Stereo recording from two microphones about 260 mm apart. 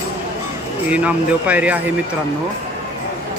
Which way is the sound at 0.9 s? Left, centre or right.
Centre.